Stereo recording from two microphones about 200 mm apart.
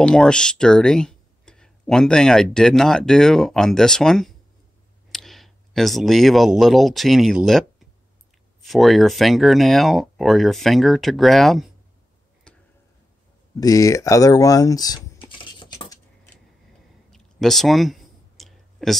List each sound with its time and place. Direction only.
0.0 s speech: 5° left (ahead or behind)
8.6 s speech: centre (ahead or behind)
12.5 s tick-tock: 5° left (ahead or behind)
13.6 s speech: 15° left (ahead or behind)
15.2 s typing: 25° left (ahead or behind)
17.1 s a sound: centre (ahead or behind)